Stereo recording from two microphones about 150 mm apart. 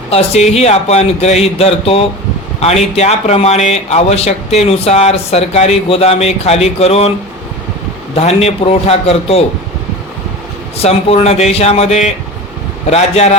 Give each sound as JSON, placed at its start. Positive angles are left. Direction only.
{"t": 0.1, "sound": "a man's voice", "side_deg": 45}
{"t": 8.1, "sound": "a man's voice", "side_deg": 45}
{"t": 10.8, "sound": "a man's voice", "side_deg": 45}